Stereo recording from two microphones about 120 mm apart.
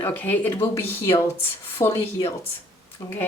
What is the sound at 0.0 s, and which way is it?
Speech, 15° left (ahead or behind).